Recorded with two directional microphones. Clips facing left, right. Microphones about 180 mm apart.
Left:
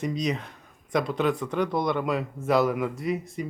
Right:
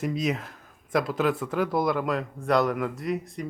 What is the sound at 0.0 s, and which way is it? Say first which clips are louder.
Speech: even; 5° right (ahead or behind).